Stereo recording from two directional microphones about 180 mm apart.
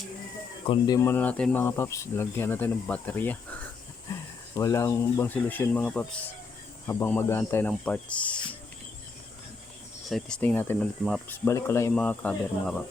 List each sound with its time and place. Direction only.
0.7 s speech: 20° left (ahead or behind)
10.1 s speech: 5° left (ahead or behind)